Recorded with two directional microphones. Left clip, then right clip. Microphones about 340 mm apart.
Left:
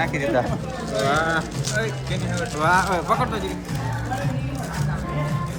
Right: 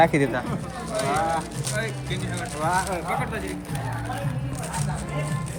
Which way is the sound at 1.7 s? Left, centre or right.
Centre.